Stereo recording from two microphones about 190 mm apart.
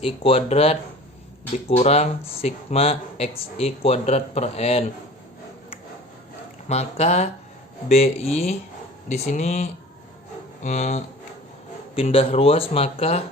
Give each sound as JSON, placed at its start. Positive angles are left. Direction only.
{"t": 0.0, "sound": "speech", "side_deg": 30}
{"t": 6.7, "sound": "speech", "side_deg": 35}